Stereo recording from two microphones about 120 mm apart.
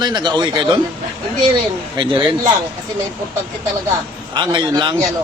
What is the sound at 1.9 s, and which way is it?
Speech, 45° right (ahead or behind).